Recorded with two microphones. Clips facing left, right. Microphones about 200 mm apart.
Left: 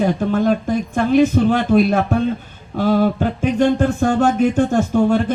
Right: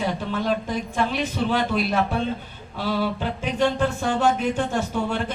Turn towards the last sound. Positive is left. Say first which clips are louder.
# left 10 dB
turn(degrees=45)  # may be behind; listen again after turning